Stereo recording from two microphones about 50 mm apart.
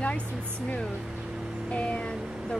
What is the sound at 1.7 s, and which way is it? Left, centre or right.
Speech, left.